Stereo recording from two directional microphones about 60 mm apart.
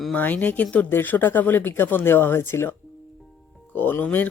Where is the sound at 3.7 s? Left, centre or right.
Left.